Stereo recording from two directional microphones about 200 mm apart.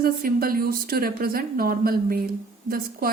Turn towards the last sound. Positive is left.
turn(degrees=-45)  # may be behind; listen again after turning